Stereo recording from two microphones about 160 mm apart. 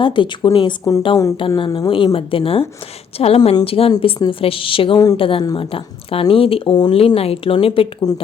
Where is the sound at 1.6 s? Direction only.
30° left (ahead or behind).